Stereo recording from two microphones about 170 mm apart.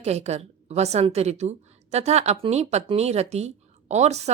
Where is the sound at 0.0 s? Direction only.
40° right (ahead or behind).